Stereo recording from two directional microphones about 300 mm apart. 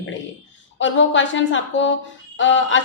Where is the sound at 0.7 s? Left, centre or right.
Left.